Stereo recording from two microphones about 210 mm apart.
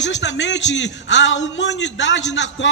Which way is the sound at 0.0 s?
60° left (ahead or behind).